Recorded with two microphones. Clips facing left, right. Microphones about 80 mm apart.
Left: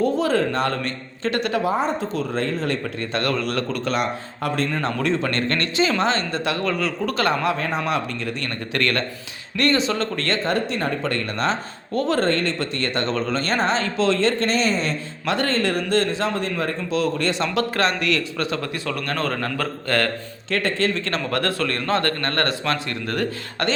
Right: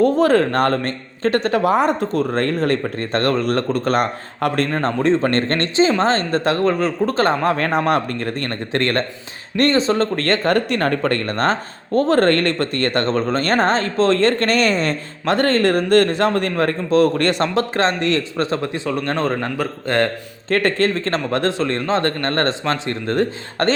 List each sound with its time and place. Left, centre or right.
0.0 s speech: right
1.6 s speech: right
7.5 s speech: right
17.5 s a man's voice: right
20.5 s speech: right
21.2 s a man's voice: right